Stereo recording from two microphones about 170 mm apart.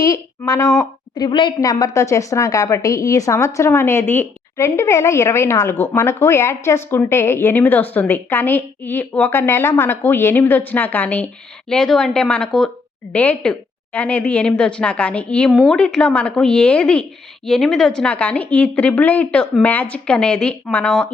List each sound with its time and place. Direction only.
0.0 s a woman's voice: 20° left (ahead or behind); by 21.1 s 5° left (ahead or behind)